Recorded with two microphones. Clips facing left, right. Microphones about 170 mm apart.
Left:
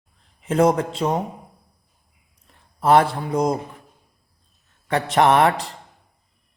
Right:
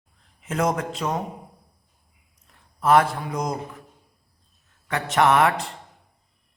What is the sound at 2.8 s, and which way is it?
A man's voice, 30° left (ahead or behind).